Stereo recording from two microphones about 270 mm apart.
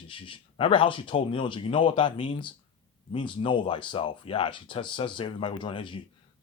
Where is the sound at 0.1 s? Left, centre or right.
Centre.